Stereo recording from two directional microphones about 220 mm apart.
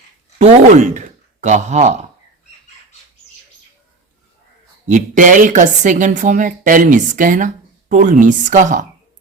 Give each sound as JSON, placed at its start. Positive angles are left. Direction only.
{"t": 0.3, "sound": "speech", "side_deg": -30}
{"t": 4.9, "sound": "speech", "side_deg": -35}